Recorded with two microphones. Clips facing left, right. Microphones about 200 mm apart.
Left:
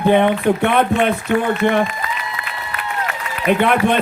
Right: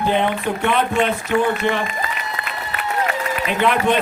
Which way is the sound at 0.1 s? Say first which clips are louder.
Left 8 dB; 55° left (ahead or behind).